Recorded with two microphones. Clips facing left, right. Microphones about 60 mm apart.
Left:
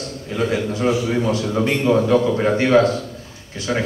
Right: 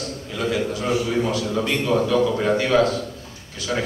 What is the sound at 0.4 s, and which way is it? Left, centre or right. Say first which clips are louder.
A man's voice: left 3 dB; left.